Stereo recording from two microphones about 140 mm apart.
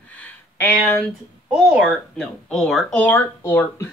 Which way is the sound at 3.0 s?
15° left (ahead or behind).